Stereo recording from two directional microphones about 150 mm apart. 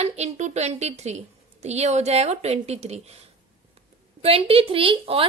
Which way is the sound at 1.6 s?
45° right (ahead or behind).